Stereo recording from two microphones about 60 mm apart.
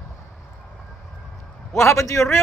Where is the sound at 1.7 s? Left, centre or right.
Left.